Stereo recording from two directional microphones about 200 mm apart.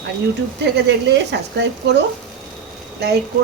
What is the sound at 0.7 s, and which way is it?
Speech, 60° right (ahead or behind).